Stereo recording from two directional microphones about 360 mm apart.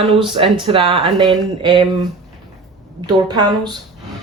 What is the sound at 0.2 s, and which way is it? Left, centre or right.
Speech, centre.